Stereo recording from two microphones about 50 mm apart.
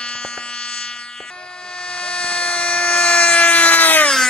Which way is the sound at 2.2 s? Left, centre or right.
Left.